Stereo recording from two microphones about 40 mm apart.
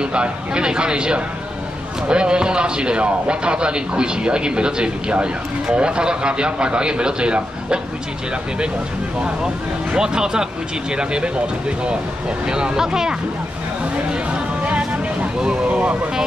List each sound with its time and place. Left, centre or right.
0.0 s speech: right
9.9 s speech: centre
12.4 s speech: right
14.3 s music: right
15.4 s speech: right